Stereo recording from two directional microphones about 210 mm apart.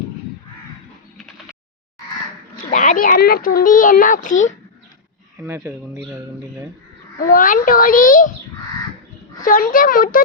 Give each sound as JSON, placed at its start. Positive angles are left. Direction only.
{"t": 2.6, "sound": "a child's voice", "side_deg": 35}
{"t": 5.4, "sound": "speech", "side_deg": -10}
{"t": 7.2, "sound": "a child's voice", "side_deg": 40}
{"t": 9.4, "sound": "a child's voice", "side_deg": 40}